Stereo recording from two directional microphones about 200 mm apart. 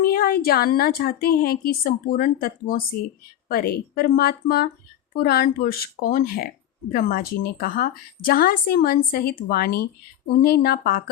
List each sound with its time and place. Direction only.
0.0 s a woman's voice: 45° left (ahead or behind)